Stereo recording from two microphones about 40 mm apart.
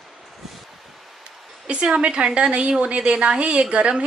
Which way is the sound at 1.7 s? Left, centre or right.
Right.